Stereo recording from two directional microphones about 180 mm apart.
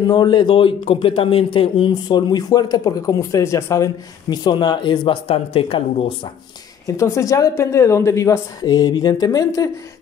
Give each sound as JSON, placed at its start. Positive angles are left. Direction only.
{"t": 0.0, "sound": "speech", "side_deg": 25}
{"t": 6.9, "sound": "a woman's voice", "side_deg": 15}